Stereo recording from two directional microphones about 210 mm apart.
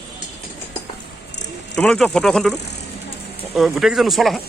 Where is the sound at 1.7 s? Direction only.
5° left (ahead or behind).